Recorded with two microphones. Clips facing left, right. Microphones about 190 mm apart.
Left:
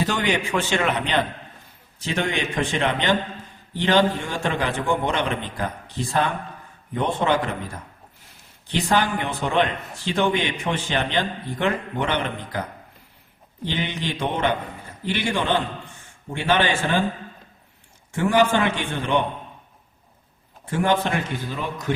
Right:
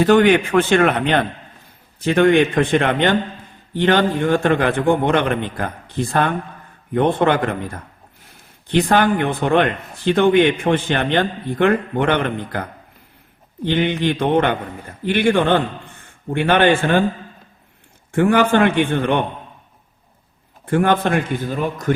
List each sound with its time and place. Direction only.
0.0 s a man's voice: 55° right (ahead or behind)
13.7 s a man's voice: 55° right (ahead or behind)
18.1 s a man's voice: 55° right (ahead or behind)
20.7 s a man's voice: 55° right (ahead or behind)